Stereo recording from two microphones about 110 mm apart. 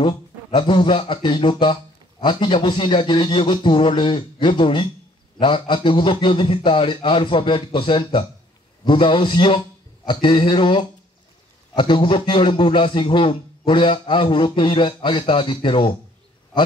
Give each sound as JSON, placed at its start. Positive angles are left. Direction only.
{"t": 0.0, "sound": "a man's voice", "side_deg": 45}